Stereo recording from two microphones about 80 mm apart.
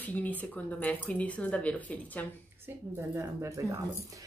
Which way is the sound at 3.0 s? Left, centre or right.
Right.